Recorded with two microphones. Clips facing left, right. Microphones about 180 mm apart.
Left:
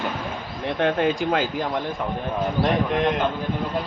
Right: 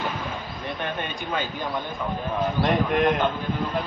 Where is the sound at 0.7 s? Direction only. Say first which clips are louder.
Left 12 dB; 80° left.